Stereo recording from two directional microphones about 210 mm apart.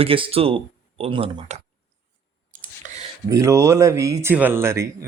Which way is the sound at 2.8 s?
40° right (ahead or behind).